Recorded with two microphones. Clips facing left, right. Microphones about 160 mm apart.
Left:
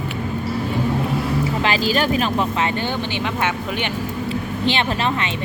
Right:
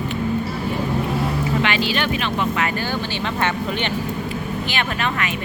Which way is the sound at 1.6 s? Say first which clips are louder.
Left 2 dB; 40° left (ahead or behind).